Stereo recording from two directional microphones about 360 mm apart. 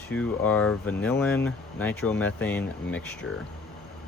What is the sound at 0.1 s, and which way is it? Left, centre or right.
Speech, centre.